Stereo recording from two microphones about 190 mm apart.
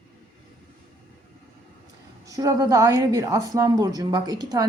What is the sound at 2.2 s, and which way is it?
A woman's voice, 20° right (ahead or behind).